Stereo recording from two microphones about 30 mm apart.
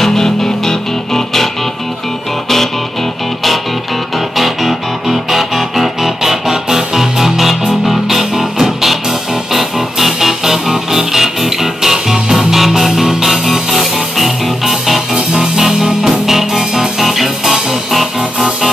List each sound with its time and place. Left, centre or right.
0.0 s music: centre
4.4 s music: centre